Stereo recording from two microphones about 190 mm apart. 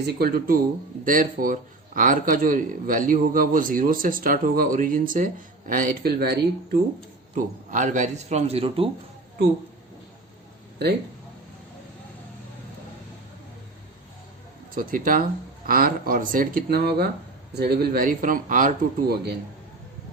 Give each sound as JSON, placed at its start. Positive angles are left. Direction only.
{"t": 0.0, "sound": "a man's voice", "side_deg": -55}
{"t": 7.3, "sound": "a man's voice", "side_deg": -45}
{"t": 14.8, "sound": "a man's voice", "side_deg": -45}